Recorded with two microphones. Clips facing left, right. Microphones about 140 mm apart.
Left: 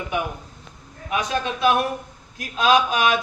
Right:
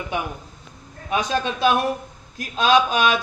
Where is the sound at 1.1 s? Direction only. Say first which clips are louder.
Right 2 dB; 30° right (ahead or behind).